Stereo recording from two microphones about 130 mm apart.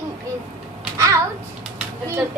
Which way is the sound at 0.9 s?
25° right (ahead or behind).